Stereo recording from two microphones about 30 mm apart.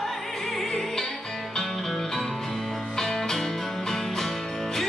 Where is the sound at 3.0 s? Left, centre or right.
Centre.